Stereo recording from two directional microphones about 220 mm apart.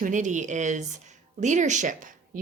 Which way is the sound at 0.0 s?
35° right (ahead or behind).